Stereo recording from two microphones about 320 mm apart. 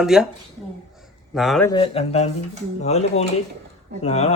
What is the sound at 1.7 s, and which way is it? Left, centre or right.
Speech, centre.